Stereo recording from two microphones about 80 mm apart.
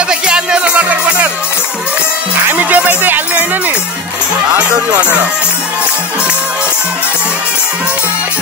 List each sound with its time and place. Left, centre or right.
0.1 s music: centre
2.4 s music: centre